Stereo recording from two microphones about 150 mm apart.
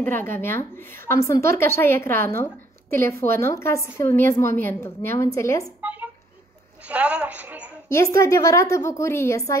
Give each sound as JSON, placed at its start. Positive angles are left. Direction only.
{"t": 0.0, "sound": "a woman's voice", "side_deg": 15}
{"t": 5.8, "sound": "a sound", "side_deg": -10}
{"t": 7.9, "sound": "a woman's voice", "side_deg": 20}